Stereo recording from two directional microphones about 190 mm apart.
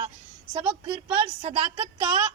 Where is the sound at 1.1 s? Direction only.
30° right (ahead or behind).